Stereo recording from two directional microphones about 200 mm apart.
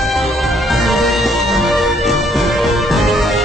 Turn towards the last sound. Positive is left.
turn(degrees=0)  # may be behind; listen again after turning